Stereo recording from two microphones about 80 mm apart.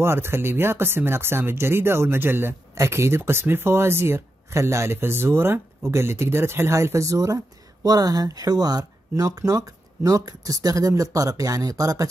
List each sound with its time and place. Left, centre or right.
0.0 s speech: right